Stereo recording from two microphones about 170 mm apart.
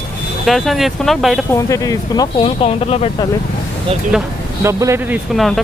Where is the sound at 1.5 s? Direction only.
20° left (ahead or behind).